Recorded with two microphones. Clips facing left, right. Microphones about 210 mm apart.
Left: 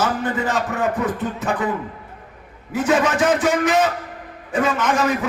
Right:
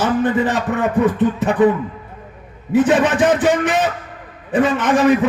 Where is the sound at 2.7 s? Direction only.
35° right (ahead or behind).